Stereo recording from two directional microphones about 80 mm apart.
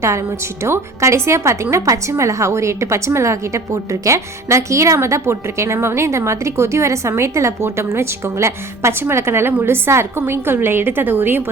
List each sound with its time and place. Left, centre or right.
0.6 s a woman's voice: right